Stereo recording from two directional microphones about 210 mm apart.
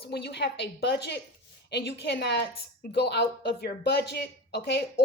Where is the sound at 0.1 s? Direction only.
50° left (ahead or behind).